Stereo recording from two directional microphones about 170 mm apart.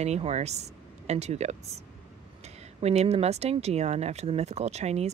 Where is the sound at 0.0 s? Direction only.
40° right (ahead or behind).